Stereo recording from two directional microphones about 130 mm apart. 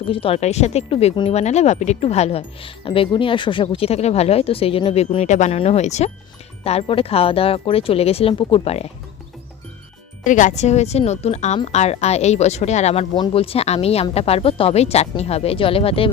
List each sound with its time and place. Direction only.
0.1 s speech: 45° left (ahead or behind)
1.4 s speech: 60° left (ahead or behind)
5.2 s speech: 65° left (ahead or behind)
6.7 s speech: 50° left (ahead or behind)
10.2 s speech: 75° left (ahead or behind); by 13.1 s 55° left (ahead or behind)
13.1 s speech: 45° left (ahead or behind)